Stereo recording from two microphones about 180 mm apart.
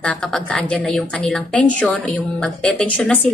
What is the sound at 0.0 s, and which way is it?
A woman's voice, 5° left (ahead or behind).